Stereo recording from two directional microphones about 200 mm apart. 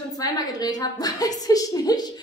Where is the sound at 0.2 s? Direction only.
20° left (ahead or behind).